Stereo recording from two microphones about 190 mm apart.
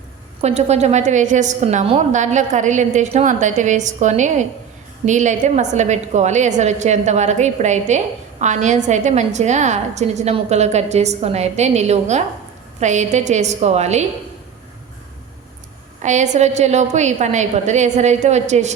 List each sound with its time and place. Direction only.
0.4 s a woman's voice: 35° right (ahead or behind)
16.0 s a woman's voice: 40° right (ahead or behind)